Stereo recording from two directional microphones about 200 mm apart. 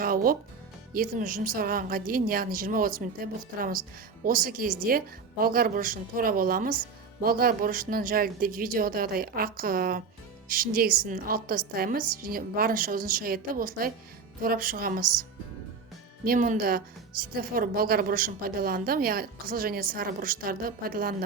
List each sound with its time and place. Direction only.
0.0 s music: 45° right (ahead or behind)
0.9 s a woman's voice: 45° right (ahead or behind)